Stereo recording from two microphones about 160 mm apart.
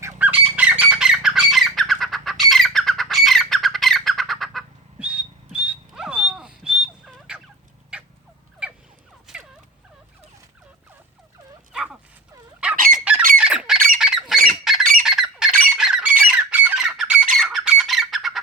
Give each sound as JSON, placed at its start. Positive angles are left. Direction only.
{"t": 0.2, "sound": "squawk", "side_deg": -10}
{"t": 7.9, "sound": "turkey", "side_deg": -5}
{"t": 9.2, "sound": "fowl", "side_deg": -5}
{"t": 11.7, "sound": "dog", "side_deg": -5}
{"t": 12.7, "sound": "squawk", "side_deg": -60}
{"t": 13.4, "sound": "squawk", "side_deg": -5}